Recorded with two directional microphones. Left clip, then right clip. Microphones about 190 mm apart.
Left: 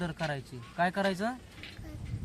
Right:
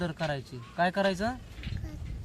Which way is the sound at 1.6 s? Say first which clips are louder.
Right 1 dB; 25° left (ahead or behind).